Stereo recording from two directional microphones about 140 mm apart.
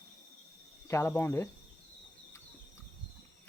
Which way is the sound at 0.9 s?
20° left (ahead or behind).